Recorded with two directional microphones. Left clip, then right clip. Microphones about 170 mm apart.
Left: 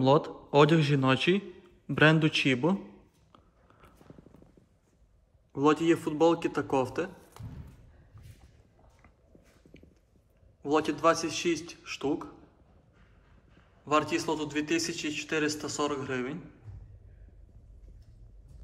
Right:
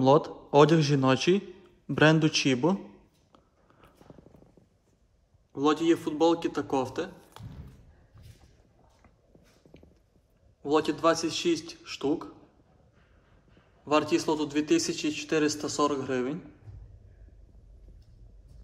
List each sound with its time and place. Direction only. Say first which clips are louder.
0.0 s a man's voice: right 2 dB; 15° right (ahead or behind)
5.5 s a man's voice: even; centre (ahead or behind)
10.6 s a man's voice: right 1 dB; 10° right (ahead or behind)
13.8 s a man's voice: right 2 dB; 15° right (ahead or behind)